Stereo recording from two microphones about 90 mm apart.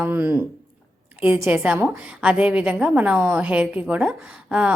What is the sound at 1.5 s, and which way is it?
A woman's voice, 15° right (ahead or behind).